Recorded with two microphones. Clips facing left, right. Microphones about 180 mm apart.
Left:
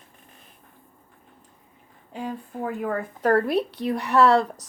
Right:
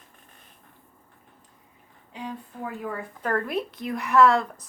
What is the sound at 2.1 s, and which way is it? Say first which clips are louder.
Speech: left 4 dB; 50° left (ahead or behind).